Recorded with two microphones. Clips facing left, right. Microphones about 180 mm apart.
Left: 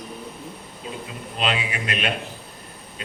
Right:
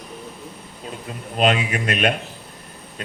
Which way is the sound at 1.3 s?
45° right (ahead or behind).